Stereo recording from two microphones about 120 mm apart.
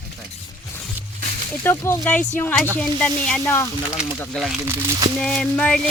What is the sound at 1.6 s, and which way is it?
Speech, 15° left (ahead or behind).